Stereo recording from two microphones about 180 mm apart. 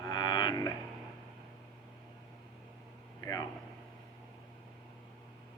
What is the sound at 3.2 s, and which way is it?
Speech, 20° left (ahead or behind).